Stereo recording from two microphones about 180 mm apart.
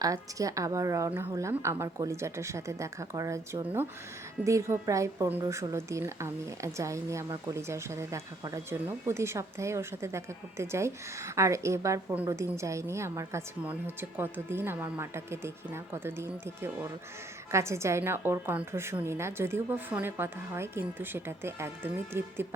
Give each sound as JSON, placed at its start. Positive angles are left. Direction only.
{"t": 0.0, "sound": "a woman's voice", "side_deg": -20}